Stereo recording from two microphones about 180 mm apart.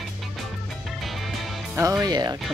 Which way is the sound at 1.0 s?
Centre (ahead or behind).